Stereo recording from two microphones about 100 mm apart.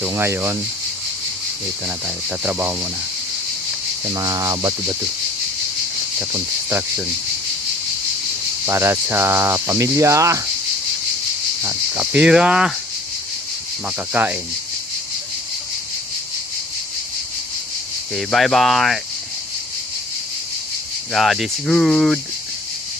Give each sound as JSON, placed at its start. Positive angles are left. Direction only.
{"t": 0.1, "sound": "speech", "side_deg": -25}
{"t": 2.0, "sound": "speech", "side_deg": -15}
{"t": 4.1, "sound": "speech", "side_deg": -40}
{"t": 6.3, "sound": "speech", "side_deg": -25}
{"t": 8.6, "sound": "speech", "side_deg": -25}
{"t": 11.9, "sound": "speech", "side_deg": -10}
{"t": 13.8, "sound": "speech", "side_deg": -15}
{"t": 18.1, "sound": "speech", "side_deg": 5}
{"t": 21.1, "sound": "speech", "side_deg": 0}